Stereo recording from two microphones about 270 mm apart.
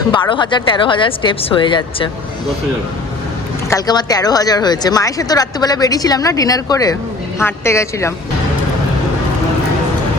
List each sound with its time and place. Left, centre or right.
0.1 s a woman's voice: centre
3.7 s a woman's voice: centre